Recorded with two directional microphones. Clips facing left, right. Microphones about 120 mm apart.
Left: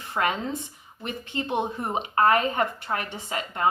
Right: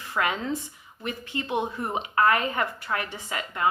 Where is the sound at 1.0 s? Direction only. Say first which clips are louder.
Left 1 dB; 25° left (ahead or behind).